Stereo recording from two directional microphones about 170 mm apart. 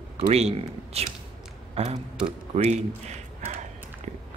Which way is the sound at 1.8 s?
35° right (ahead or behind).